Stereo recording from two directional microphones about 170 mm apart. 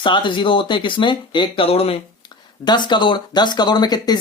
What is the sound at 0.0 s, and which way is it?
Speech, 30° left (ahead or behind).